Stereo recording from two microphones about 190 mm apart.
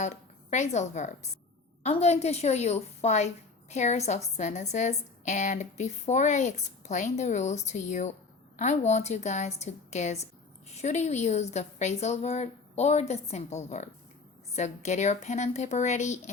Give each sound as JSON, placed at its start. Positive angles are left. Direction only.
{"t": 0.0, "sound": "a woman's voice", "side_deg": 40}